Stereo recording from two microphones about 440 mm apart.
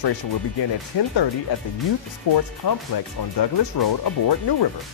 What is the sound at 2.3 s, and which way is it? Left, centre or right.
Speech, left.